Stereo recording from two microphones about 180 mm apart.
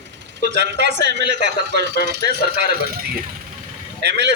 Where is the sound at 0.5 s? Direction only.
70° right (ahead or behind).